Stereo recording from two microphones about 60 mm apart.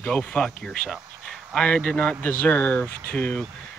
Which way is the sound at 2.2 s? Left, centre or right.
Left.